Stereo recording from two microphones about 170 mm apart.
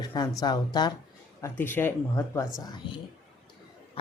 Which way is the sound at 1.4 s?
10° left (ahead or behind).